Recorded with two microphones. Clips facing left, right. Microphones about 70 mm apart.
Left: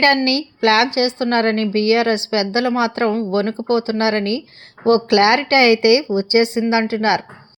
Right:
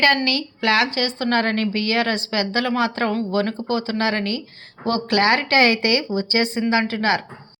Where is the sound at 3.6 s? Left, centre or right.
Left.